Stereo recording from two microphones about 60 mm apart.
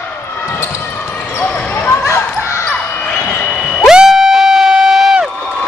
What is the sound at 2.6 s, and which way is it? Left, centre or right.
Basketball bounce, left.